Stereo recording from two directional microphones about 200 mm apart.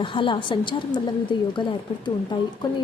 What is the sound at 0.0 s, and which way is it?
Speech, 25° left (ahead or behind).